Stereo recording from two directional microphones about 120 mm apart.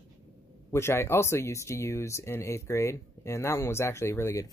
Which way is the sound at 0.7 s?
20° left (ahead or behind).